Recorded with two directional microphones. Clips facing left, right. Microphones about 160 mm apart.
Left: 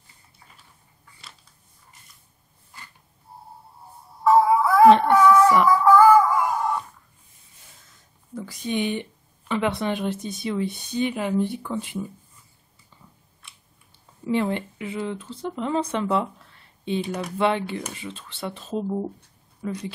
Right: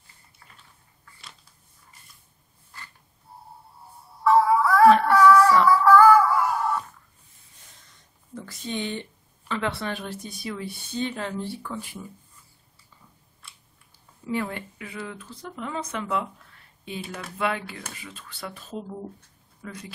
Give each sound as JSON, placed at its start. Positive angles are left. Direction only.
{"t": 4.2, "sound": "music", "side_deg": 15}
{"t": 7.8, "sound": "a sound", "side_deg": 5}
{"t": 9.5, "sound": "speech", "side_deg": 15}
{"t": 14.3, "sound": "speech", "side_deg": 25}